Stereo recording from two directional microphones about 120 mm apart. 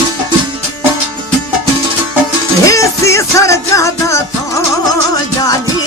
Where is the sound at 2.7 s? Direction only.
25° left (ahead or behind).